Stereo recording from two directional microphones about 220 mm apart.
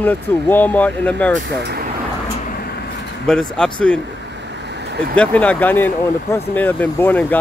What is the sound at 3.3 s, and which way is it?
Speech, 5° left (ahead or behind).